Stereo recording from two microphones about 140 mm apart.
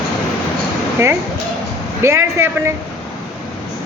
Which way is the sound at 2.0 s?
20° right (ahead or behind).